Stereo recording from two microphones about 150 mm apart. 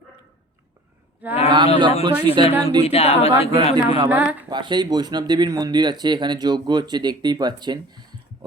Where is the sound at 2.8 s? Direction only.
45° left (ahead or behind).